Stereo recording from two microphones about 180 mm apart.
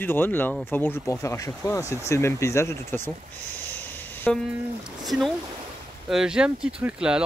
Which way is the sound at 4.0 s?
10° left (ahead or behind).